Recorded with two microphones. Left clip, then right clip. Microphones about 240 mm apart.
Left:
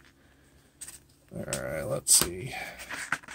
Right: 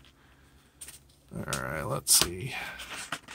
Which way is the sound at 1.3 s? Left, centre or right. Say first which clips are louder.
Even; centre.